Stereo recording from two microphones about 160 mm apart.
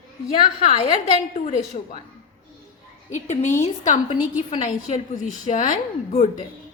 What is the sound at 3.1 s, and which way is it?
A woman's voice, 50° left (ahead or behind).